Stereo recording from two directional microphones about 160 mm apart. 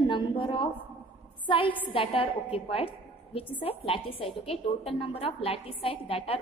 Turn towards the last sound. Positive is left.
turn(degrees=35)  # may be behind; listen again after turning